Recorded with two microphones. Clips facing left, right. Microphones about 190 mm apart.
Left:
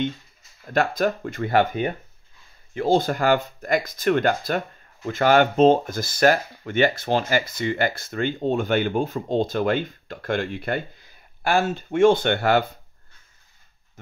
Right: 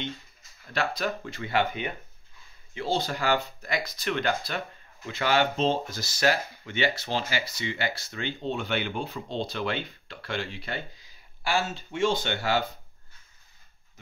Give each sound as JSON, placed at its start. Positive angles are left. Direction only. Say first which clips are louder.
{"t": 0.7, "sound": "speech", "louder": "left 7 dB", "side_deg": 50}